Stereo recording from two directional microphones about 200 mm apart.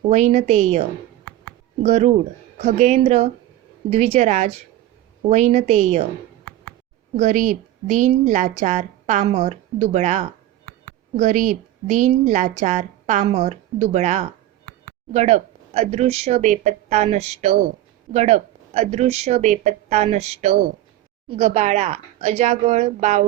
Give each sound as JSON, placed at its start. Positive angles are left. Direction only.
{"t": 0.1, "sound": "a woman's voice", "side_deg": -35}
{"t": 7.2, "sound": "a woman's voice", "side_deg": -40}